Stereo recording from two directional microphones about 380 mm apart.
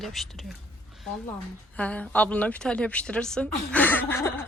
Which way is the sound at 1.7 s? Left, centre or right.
Centre.